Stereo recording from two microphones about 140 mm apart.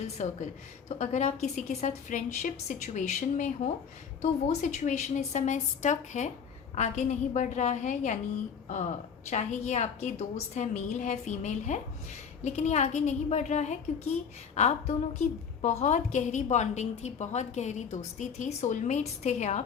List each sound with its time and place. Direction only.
0.2 s a woman's voice: 55° left (ahead or behind)
9.3 s a woman's voice: 55° left (ahead or behind)